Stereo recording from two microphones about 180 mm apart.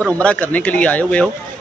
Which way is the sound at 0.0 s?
5° left (ahead or behind).